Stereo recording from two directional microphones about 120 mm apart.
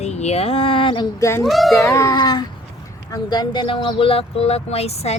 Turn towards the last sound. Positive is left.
turn(degrees=60)  # may be behind; listen again after turning